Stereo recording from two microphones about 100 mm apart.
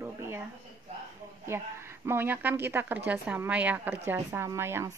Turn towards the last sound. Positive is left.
turn(degrees=-25)  # may be behind; listen again after turning